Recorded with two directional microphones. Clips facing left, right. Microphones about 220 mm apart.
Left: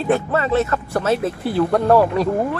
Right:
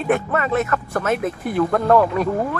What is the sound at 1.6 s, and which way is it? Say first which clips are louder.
Speech: left 1 dB; 10° left (ahead or behind).